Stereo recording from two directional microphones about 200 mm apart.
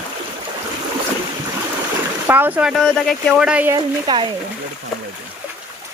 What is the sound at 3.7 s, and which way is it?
Speech, 20° right (ahead or behind).